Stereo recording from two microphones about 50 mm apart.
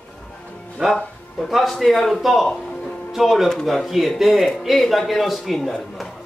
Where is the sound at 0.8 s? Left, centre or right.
Centre.